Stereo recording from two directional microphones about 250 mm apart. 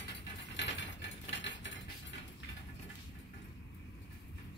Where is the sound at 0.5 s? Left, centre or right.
Left.